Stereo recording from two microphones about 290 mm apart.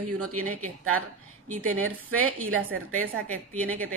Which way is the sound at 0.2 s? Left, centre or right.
Right.